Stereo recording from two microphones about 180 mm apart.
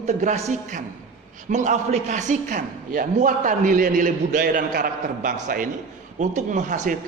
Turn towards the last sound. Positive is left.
turn(degrees=-45)  # may be behind; listen again after turning